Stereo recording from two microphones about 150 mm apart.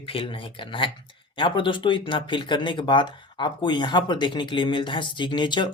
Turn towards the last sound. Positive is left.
turn(degrees=30)  # may be behind; listen again after turning